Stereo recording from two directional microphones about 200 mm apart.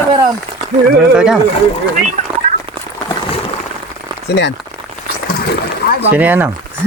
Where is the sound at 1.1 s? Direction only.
5° right (ahead or behind).